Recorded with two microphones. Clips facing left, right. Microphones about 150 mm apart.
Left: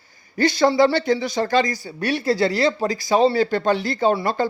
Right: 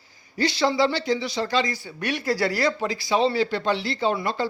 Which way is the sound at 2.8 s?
45° left (ahead or behind).